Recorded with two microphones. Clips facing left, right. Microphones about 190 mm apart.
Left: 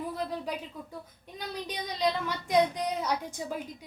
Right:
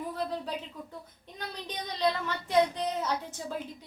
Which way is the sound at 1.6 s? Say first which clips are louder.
Even; 10° left (ahead or behind).